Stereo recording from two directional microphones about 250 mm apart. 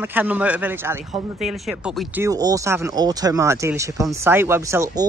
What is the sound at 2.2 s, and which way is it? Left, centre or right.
Speech, centre.